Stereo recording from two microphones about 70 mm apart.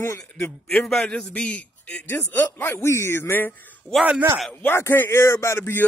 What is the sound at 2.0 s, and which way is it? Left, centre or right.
Speech, left.